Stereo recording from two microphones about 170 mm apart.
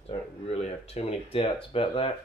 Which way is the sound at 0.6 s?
35° left (ahead or behind).